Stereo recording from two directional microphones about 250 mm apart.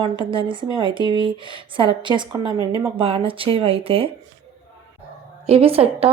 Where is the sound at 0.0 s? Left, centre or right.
Right.